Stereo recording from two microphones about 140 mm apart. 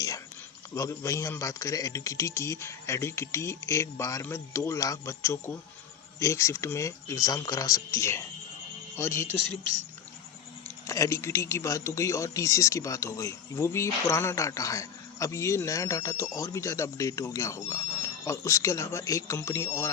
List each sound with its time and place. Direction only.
0.7 s speech: 20° left (ahead or behind)
10.8 s speech: 20° left (ahead or behind)